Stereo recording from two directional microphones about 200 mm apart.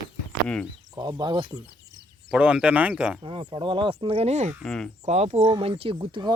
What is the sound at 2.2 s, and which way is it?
Speech, 5° right (ahead or behind).